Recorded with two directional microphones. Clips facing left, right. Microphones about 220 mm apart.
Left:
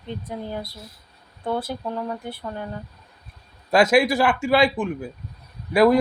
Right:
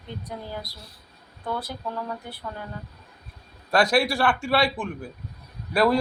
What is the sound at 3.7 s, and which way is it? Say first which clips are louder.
Speech: left 4 dB; 20° left (ahead or behind).